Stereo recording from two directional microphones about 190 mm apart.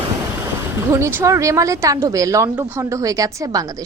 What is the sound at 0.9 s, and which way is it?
A woman's voice, 15° right (ahead or behind).